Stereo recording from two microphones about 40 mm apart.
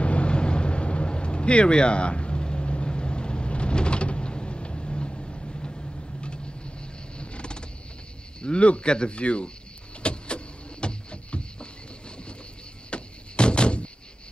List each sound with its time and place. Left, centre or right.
0.0 s vehicle: left
8.4 s speech: left
10.0 s a sound: left
12.9 s music: left